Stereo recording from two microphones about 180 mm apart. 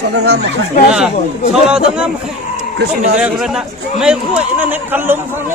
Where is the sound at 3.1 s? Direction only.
5° right (ahead or behind).